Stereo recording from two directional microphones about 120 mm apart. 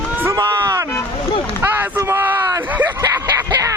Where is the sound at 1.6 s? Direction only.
15° right (ahead or behind).